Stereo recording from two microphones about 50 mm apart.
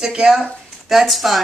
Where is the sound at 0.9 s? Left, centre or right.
Centre.